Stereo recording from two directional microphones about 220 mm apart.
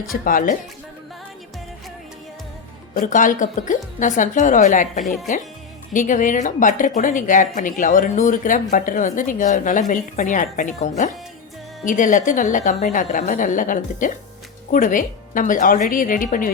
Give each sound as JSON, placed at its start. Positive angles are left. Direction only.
{"t": 0.1, "sound": "speech", "side_deg": 40}
{"t": 2.9, "sound": "speech", "side_deg": 35}
{"t": 5.0, "sound": "speech", "side_deg": 0}
{"t": 5.9, "sound": "speech", "side_deg": 35}